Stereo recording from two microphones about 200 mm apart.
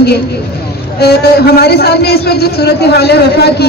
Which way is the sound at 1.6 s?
55° left (ahead or behind).